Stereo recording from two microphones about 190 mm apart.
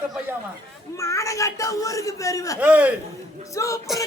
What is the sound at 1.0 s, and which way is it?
Speech, 15° left (ahead or behind).